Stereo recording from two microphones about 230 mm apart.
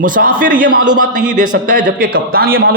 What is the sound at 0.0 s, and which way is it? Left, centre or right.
Speech, right.